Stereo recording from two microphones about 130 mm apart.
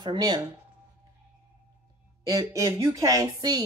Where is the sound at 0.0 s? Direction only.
35° right (ahead or behind).